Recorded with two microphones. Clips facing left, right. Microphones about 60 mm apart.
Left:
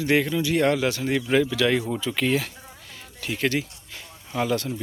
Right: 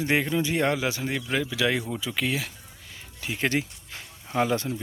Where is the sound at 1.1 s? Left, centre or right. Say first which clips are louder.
Left 7 dB; centre.